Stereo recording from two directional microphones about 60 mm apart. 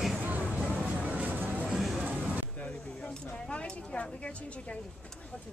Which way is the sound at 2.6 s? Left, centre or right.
Centre.